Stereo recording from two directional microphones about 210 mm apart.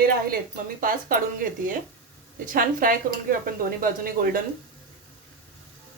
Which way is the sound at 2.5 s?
40° right (ahead or behind).